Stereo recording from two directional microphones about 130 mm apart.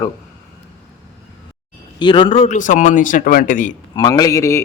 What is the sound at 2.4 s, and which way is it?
Speech, 70° left (ahead or behind).